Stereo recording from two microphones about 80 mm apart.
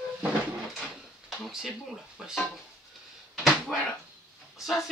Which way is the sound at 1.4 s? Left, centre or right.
Centre.